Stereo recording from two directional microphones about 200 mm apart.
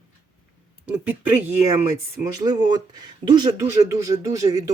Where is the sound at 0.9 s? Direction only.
10° right (ahead or behind).